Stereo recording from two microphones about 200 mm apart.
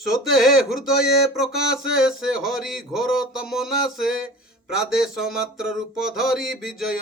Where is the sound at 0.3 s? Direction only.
Centre (ahead or behind).